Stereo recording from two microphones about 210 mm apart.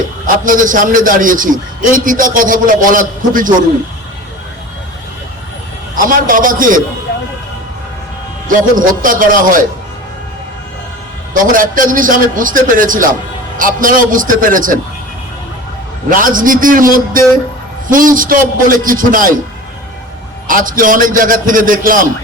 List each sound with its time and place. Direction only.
0.4 s a man's voice: 40° right (ahead or behind)
6.1 s a man's voice: 40° right (ahead or behind)
7.1 s music: 45° left (ahead or behind)
8.4 s a man's voice: 40° right (ahead or behind)
11.5 s a man's voice: 40° right (ahead or behind)
16.0 s a man's voice: 40° right (ahead or behind)
20.5 s a man's voice: 40° right (ahead or behind)